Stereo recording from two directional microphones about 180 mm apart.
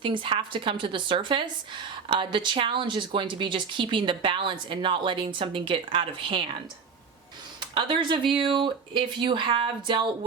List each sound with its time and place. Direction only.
0.0 s speech: 30° right (ahead or behind)
7.6 s speech: 25° right (ahead or behind)